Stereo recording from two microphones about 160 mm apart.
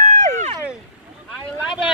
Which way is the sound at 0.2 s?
50° right (ahead or behind).